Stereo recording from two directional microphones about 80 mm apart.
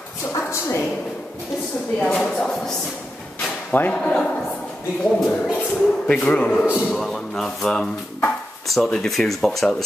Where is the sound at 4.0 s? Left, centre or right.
Centre.